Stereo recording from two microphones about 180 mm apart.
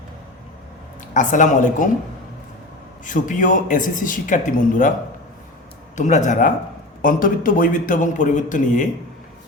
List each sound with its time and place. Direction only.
1.1 s a man's voice: 45° left (ahead or behind)
3.0 s a man's voice: 45° left (ahead or behind)
6.0 s a man's voice: 40° left (ahead or behind)